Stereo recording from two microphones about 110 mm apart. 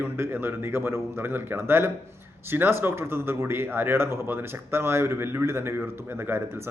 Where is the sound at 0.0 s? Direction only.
20° right (ahead or behind).